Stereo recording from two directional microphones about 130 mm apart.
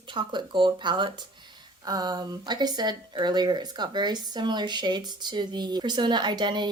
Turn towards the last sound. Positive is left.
turn(degrees=-35)  # may be behind; listen again after turning